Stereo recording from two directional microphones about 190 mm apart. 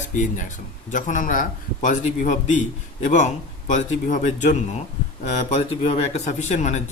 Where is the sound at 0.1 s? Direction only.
40° left (ahead or behind).